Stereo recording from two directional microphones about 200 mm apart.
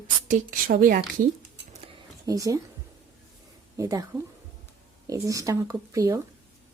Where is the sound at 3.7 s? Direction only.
15° right (ahead or behind).